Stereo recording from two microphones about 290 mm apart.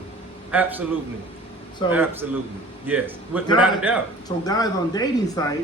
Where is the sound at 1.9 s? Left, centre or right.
Centre.